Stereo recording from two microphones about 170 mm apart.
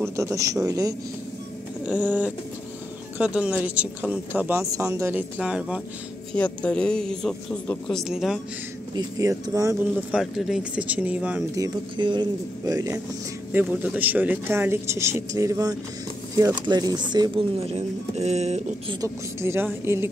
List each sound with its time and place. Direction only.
0.0 s speech: 20° right (ahead or behind)
1.9 s speech: 10° right (ahead or behind)
6.3 s speech: 5° left (ahead or behind)
8.9 s speech: 20° right (ahead or behind)
10.1 s speech: 5° right (ahead or behind)
11.5 s speech: 25° right (ahead or behind)
17.7 s speech: 40° right (ahead or behind)
18.9 s speech: 15° right (ahead or behind)